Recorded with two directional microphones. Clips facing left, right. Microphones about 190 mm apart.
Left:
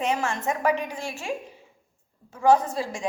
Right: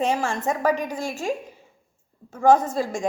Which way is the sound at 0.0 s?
30° right (ahead or behind).